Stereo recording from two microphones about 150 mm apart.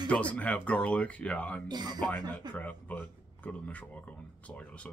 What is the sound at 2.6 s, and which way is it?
Speech, 10° left (ahead or behind).